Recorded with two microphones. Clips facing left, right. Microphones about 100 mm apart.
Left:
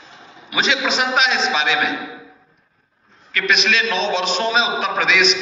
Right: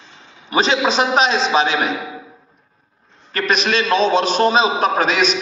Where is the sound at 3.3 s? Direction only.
40° right (ahead or behind).